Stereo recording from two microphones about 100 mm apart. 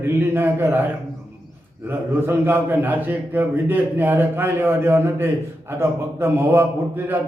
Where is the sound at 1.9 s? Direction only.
25° right (ahead or behind).